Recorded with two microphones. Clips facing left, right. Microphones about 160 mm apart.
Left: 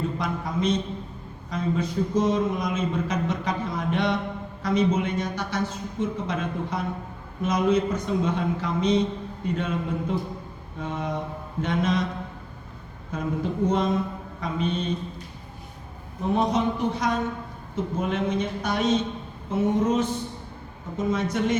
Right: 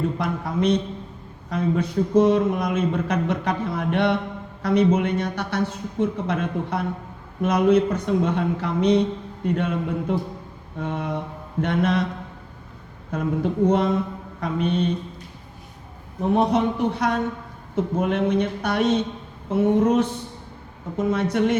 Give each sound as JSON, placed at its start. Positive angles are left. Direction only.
{"t": 0.2, "sound": "speech", "side_deg": -65}
{"t": 13.1, "sound": "speech", "side_deg": -60}
{"t": 16.3, "sound": "speech", "side_deg": -60}